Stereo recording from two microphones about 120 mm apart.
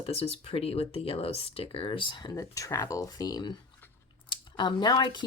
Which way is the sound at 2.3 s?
25° left (ahead or behind).